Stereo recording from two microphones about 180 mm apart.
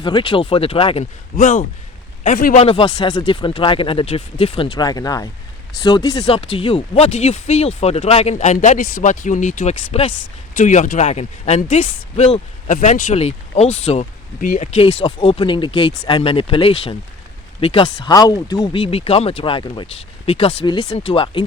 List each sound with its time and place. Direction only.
0.0 s speech: 30° left (ahead or behind)
1.4 s a man's voice: 45° left (ahead or behind)
2.6 s speech: 30° left (ahead or behind)
6.2 s speech: 35° left (ahead or behind)
15.0 s speech: 30° left (ahead or behind)